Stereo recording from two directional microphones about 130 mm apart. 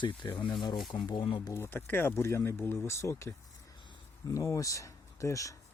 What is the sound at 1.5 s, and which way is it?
Speech, 15° left (ahead or behind).